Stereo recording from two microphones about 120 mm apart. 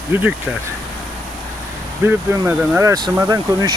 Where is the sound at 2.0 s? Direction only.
20° right (ahead or behind).